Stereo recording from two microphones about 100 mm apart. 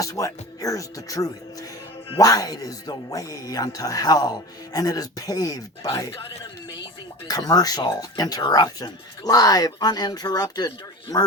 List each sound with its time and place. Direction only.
0.0 s speech: 35° left (ahead or behind)
7.3 s speech: 40° left (ahead or behind)